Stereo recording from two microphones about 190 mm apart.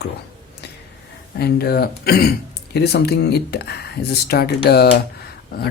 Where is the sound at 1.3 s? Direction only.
55° left (ahead or behind).